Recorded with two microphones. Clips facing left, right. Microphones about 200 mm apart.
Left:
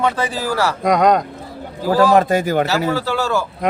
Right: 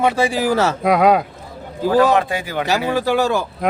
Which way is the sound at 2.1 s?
40° left (ahead or behind).